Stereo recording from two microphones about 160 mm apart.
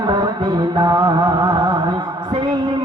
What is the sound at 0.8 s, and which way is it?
Music, 25° right (ahead or behind).